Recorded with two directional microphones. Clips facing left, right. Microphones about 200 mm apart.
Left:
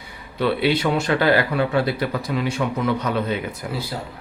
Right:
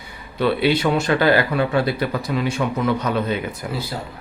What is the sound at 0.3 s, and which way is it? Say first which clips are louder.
Speech: right 2 dB; 45° right (ahead or behind).